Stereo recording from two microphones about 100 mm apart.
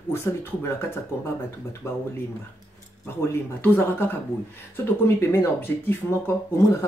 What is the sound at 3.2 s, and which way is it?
Speech, 25° left (ahead or behind).